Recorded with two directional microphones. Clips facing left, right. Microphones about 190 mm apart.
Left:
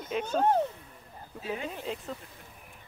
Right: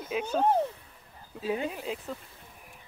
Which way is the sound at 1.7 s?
Centre (ahead or behind).